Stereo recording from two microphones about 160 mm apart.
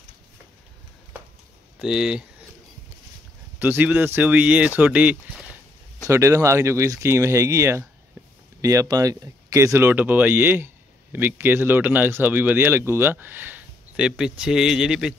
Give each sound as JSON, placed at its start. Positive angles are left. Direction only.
{"t": 1.8, "sound": "speech", "side_deg": -5}
{"t": 3.5, "sound": "speech", "side_deg": -10}
{"t": 6.0, "sound": "speech", "side_deg": -20}